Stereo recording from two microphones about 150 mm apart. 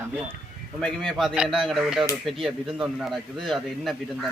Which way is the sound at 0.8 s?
5° left (ahead or behind).